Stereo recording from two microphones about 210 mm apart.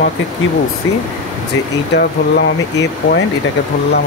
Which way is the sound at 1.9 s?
50° left (ahead or behind).